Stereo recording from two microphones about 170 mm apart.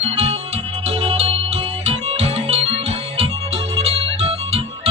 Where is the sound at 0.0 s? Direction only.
40° right (ahead or behind).